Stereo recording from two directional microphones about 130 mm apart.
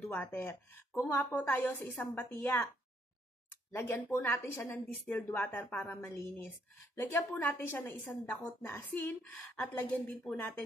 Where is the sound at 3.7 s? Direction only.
15° left (ahead or behind).